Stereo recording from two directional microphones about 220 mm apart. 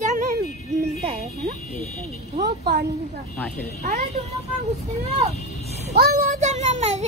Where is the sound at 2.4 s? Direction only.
45° right (ahead or behind).